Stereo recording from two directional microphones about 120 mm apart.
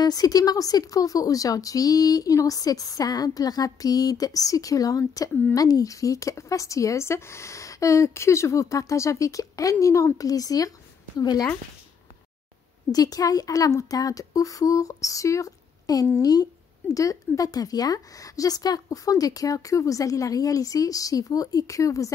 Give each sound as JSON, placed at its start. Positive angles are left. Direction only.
{"t": 0.0, "sound": "speech", "side_deg": 30}
{"t": 12.9, "sound": "speech", "side_deg": 30}